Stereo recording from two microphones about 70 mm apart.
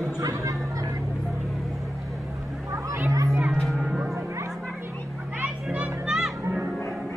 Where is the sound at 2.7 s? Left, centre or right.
Right.